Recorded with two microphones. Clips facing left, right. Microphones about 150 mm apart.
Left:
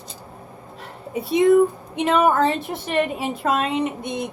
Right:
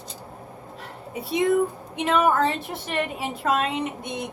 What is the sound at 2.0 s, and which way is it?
A woman's voice, 25° left (ahead or behind).